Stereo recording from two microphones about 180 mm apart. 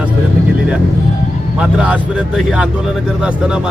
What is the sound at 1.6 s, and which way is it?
Speech, 5° right (ahead or behind).